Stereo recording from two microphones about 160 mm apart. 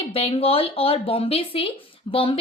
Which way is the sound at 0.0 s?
35° left (ahead or behind).